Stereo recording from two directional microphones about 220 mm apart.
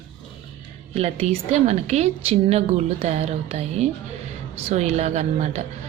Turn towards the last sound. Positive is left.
turn(degrees=-30)  # may be behind; listen again after turning